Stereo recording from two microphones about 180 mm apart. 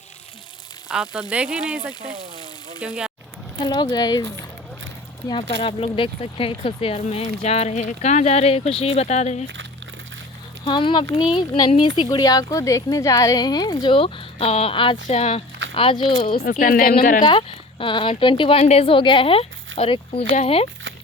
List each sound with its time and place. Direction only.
0.9 s speech: 5° right (ahead or behind)
3.6 s speech: 25° left (ahead or behind)
5.5 s speech: 30° left (ahead or behind)
10.7 s speech: 25° left (ahead or behind)
16.2 s speech: 55° left (ahead or behind)
17.2 s speech: 30° left (ahead or behind)